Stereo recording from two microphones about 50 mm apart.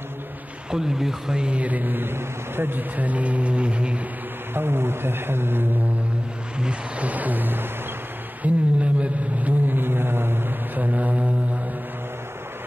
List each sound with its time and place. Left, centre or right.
0.7 s speech: centre
1.4 s vehicle: right
2.1 s speech: right
3.0 s a woman's voice: right
4.6 s speech: right
6.6 s vehicle: right
8.4 s a woman's voice: right
9.7 s mantra: right
10.8 s vehicle: right